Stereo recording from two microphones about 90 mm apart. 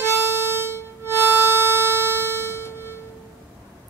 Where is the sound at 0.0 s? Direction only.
25° right (ahead or behind).